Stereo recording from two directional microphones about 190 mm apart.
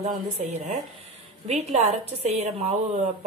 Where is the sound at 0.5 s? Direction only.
35° right (ahead or behind).